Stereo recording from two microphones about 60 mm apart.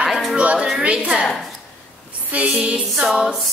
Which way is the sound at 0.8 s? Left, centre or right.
Centre.